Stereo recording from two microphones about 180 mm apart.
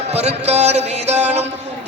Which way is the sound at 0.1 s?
35° right (ahead or behind).